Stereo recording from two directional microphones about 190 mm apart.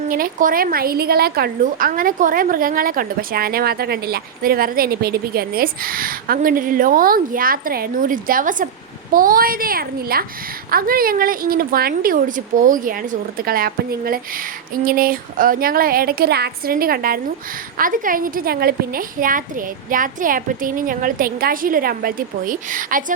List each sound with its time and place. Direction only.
0.1 s a woman's voice: 45° right (ahead or behind)